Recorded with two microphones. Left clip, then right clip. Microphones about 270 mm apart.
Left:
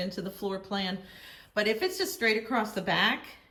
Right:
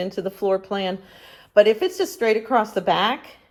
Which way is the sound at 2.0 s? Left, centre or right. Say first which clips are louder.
Right 7 dB; right.